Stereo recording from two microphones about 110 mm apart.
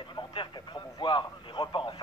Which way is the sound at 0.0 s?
45° left (ahead or behind).